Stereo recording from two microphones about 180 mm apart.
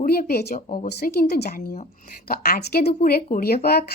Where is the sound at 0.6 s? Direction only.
40° left (ahead or behind).